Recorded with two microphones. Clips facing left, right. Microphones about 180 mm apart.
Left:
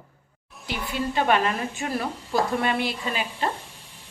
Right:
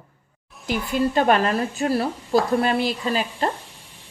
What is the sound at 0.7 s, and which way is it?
Speech, 45° right (ahead or behind).